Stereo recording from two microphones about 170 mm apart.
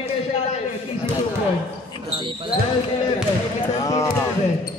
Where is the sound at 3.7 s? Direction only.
20° left (ahead or behind).